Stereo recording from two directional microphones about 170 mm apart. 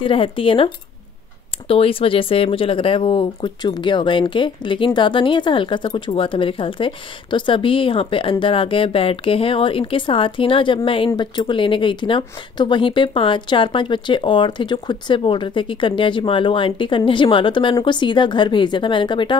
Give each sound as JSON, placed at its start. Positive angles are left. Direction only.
{"t": 0.0, "sound": "speech", "side_deg": 30}
{"t": 1.7, "sound": "speech", "side_deg": 35}